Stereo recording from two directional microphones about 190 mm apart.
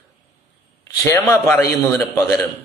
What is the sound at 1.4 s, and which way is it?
A man's voice, 15° left (ahead or behind).